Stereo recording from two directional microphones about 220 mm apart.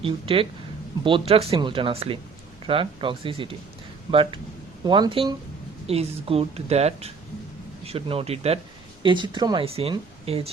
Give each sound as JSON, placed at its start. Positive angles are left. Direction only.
{"t": 0.0, "sound": "speech", "side_deg": -25}